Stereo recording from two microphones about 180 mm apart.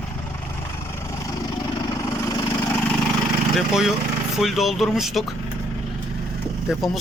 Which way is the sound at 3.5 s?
Centre (ahead or behind).